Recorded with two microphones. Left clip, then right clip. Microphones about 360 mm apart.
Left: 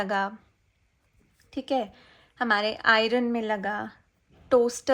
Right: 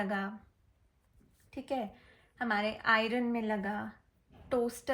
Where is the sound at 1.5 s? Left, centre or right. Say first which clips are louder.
Left 9 dB; centre.